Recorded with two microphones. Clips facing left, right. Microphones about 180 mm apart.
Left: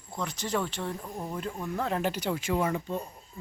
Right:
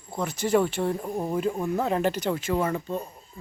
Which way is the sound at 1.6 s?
5° right (ahead or behind).